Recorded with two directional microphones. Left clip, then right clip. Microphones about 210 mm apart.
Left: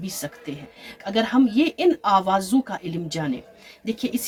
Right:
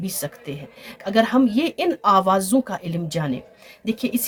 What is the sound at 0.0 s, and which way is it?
A woman's voice, 55° right (ahead or behind).